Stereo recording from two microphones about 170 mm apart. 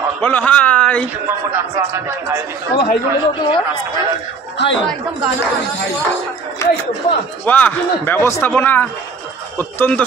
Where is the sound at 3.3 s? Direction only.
25° left (ahead or behind).